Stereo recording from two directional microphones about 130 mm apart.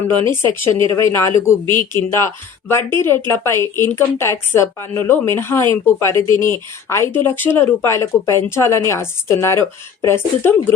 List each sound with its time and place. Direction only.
0.8 s speech: 40° right (ahead or behind)
1.0 s speech: 20° left (ahead or behind)